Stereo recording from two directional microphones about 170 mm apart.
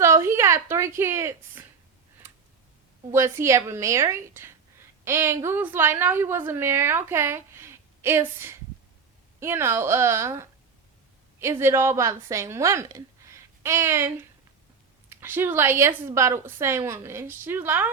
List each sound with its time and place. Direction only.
0.0 s a woman's voice: 15° right (ahead or behind)
3.1 s a woman's voice: 15° right (ahead or behind)
15.1 s a woman's voice: 15° right (ahead or behind)